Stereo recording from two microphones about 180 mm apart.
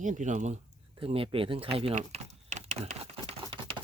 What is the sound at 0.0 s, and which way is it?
Speech, 45° right (ahead or behind).